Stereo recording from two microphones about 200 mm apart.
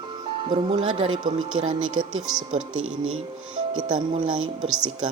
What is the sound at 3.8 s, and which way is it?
Speech, 25° right (ahead or behind).